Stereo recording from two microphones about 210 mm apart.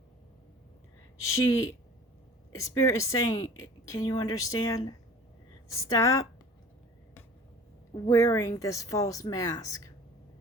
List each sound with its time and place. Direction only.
1.3 s a woman's voice: 15° left (ahead or behind)
7.9 s a woman's voice: 15° left (ahead or behind)